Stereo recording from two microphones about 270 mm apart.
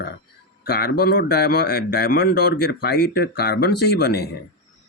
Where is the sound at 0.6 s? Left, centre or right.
Left.